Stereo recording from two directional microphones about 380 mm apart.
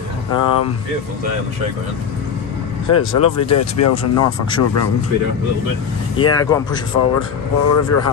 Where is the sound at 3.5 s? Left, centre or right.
Left.